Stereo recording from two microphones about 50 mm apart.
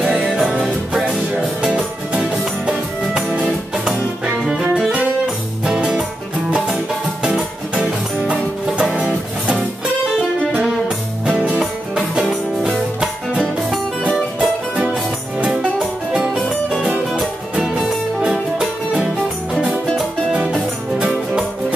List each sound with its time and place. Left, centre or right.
0.2 s music: centre
1.6 s music: centre
5.7 s music: centre
7.2 s music: centre
11.2 s music: right
11.6 s music: centre
16.2 s music: centre
20.3 s music: centre